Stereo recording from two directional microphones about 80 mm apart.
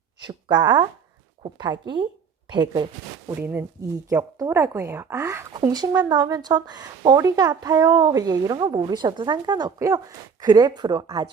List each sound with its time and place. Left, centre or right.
0.3 s speech: right
3.8 s speech: right
5.7 s speech: right
9.7 s speech: right
10.4 s speech: right